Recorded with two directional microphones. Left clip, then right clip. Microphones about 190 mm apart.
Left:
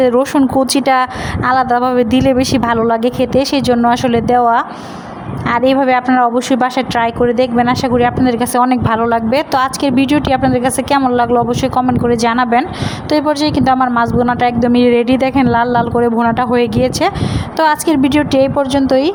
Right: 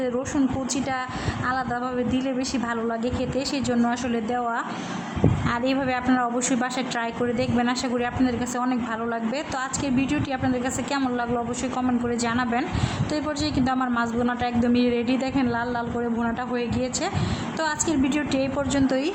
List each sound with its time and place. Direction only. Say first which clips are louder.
0.0 s a woman's voice: left 14 dB; 40° left (ahead or behind)